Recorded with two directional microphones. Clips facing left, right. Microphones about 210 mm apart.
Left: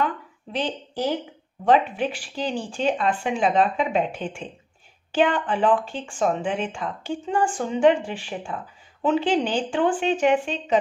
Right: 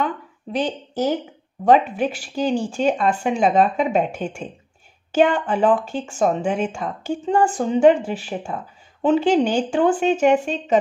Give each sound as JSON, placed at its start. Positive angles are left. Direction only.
{"t": 0.0, "sound": "a woman's voice", "side_deg": -45}